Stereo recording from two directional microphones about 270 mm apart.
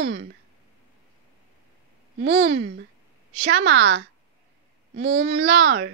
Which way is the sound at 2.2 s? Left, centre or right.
Right.